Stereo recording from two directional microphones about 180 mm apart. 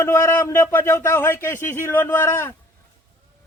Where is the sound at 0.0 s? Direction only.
15° left (ahead or behind).